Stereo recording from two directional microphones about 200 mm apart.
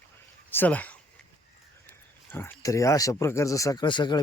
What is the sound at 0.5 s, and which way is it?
Speech, 10° left (ahead or behind).